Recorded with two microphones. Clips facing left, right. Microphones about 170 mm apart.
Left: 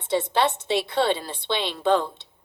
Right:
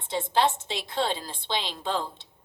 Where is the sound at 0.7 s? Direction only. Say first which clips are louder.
Left 7 dB; 65° left (ahead or behind).